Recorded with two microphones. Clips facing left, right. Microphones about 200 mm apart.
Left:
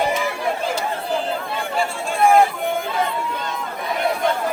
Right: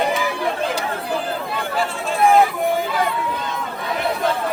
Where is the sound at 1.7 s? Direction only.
Centre (ahead or behind).